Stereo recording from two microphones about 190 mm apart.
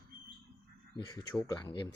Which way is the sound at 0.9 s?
20° left (ahead or behind).